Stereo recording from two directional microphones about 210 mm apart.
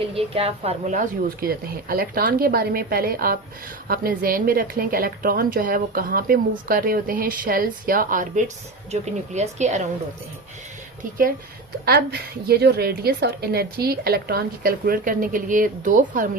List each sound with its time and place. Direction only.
0.1 s a woman's voice: 25° right (ahead or behind)
11.9 s a woman's voice: 50° right (ahead or behind)